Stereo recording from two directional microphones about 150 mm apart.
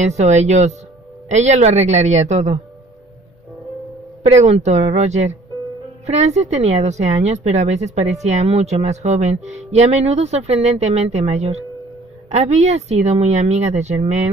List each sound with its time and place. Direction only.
0.0 s a woman's voice: 50° right (ahead or behind)
4.3 s a woman's voice: 50° right (ahead or behind)